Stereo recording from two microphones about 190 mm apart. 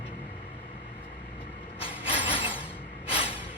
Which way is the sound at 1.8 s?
30° left (ahead or behind).